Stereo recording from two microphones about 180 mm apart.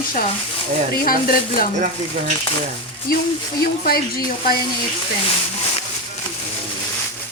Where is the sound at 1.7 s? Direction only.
45° right (ahead or behind).